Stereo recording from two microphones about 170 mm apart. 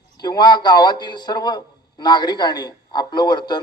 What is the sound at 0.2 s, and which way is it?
A man's voice, 25° left (ahead or behind).